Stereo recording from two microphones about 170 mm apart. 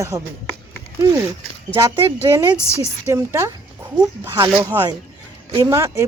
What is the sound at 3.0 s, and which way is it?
Speech, 15° right (ahead or behind).